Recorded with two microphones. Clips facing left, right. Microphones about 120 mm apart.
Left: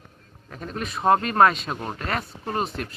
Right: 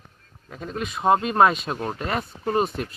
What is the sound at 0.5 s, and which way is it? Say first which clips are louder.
A man's voice: right 1 dB; centre (ahead or behind).